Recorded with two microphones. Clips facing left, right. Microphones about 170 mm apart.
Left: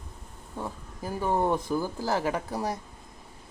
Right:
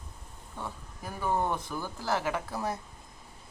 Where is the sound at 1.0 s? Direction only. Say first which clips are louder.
Left 4 dB; 35° left (ahead or behind).